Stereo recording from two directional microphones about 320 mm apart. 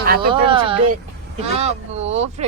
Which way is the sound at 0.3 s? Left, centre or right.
Centre.